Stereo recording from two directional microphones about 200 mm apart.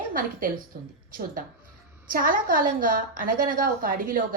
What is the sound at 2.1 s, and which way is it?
A woman's voice, 45° right (ahead or behind).